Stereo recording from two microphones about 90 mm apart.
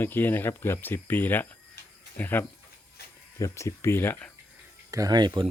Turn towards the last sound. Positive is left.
turn(degrees=-55)  # may be behind; listen again after turning